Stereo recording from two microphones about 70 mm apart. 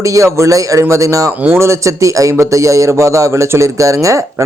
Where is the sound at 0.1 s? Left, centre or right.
Right.